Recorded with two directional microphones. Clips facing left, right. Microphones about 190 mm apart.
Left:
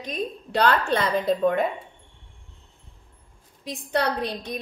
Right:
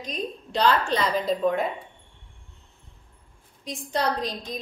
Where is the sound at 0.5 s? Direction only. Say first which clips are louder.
Left 1 dB; 60° left (ahead or behind).